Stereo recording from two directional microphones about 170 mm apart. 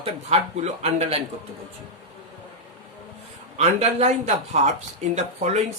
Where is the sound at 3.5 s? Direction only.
40° right (ahead or behind).